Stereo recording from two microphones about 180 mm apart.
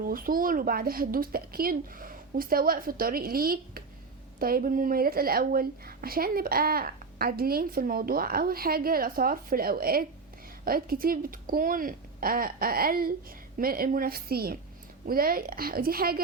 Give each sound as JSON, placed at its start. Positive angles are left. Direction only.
{"t": 0.0, "sound": "speech", "side_deg": -55}